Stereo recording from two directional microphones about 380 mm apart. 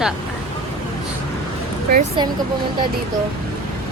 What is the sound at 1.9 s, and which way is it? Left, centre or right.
Speech, centre.